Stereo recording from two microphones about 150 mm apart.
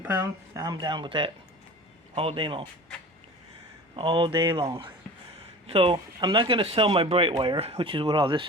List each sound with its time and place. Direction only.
0.0 s speech: 15° right (ahead or behind)
0.6 s speech: 30° right (ahead or behind)
3.9 s speech: 35° right (ahead or behind)